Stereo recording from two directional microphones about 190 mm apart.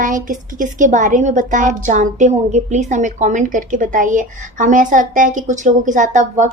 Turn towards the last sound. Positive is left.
turn(degrees=-40)  # may be behind; listen again after turning